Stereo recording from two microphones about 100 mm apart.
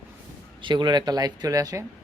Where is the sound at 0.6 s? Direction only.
50° right (ahead or behind); by 1.8 s 35° right (ahead or behind).